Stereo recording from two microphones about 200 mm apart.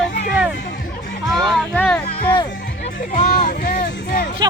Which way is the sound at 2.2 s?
20° left (ahead or behind).